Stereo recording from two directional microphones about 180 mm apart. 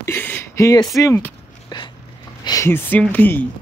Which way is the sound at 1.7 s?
25° left (ahead or behind).